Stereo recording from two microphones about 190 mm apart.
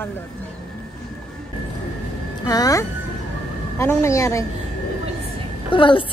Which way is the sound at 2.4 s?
20° left (ahead or behind).